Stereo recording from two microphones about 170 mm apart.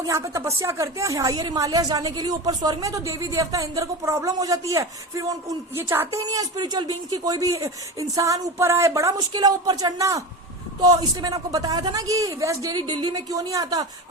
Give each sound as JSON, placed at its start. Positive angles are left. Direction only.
{"t": 0.0, "sound": "a woman's voice", "side_deg": -20}